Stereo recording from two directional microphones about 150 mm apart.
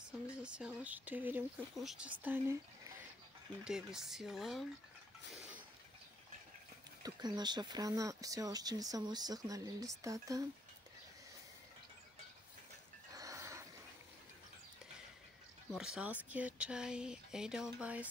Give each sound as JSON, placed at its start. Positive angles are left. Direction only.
{"t": 0.4, "sound": "speech", "side_deg": -5}
{"t": 2.2, "sound": "speech", "side_deg": -15}
{"t": 3.6, "sound": "speech", "side_deg": -5}
{"t": 7.0, "sound": "speech", "side_deg": -25}
{"t": 13.1, "sound": "a sound", "side_deg": -20}
{"t": 15.7, "sound": "speech", "side_deg": -5}